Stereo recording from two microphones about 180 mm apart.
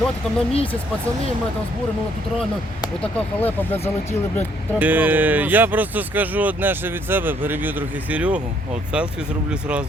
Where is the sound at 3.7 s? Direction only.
35° left (ahead or behind).